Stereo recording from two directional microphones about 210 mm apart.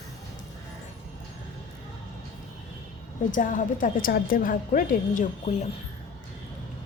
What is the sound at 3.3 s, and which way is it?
A woman's voice, 40° left (ahead or behind).